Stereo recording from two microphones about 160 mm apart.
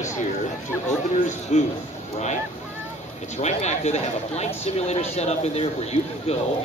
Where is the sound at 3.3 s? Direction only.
45° left (ahead or behind).